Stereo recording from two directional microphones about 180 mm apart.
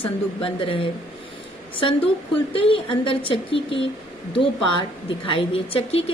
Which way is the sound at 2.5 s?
30° left (ahead or behind).